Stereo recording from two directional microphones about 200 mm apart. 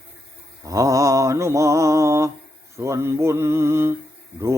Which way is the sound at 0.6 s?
15° right (ahead or behind).